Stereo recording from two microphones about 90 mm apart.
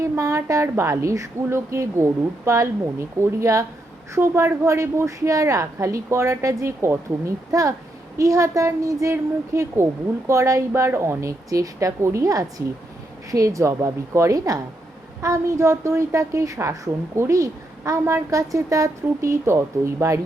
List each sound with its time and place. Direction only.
0.0 s a woman's voice: 35° right (ahead or behind)